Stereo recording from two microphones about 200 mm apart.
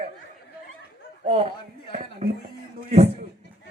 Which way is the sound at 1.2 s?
30° right (ahead or behind).